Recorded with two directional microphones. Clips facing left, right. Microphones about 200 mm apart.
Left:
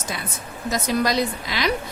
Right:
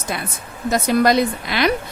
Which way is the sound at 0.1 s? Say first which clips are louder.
Right 3 dB; 60° right (ahead or behind).